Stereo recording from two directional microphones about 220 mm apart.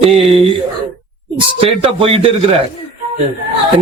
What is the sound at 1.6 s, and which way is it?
Speech, 25° right (ahead or behind).